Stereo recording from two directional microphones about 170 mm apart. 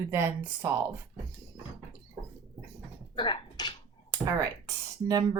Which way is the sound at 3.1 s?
30° left (ahead or behind).